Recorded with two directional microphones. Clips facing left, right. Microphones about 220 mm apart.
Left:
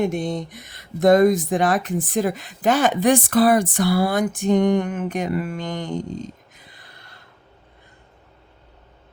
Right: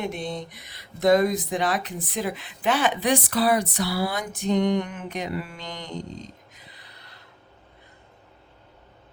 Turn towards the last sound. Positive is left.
turn(degrees=50)  # may be behind; listen again after turning